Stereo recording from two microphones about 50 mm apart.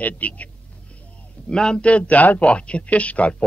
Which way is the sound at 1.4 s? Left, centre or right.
Centre.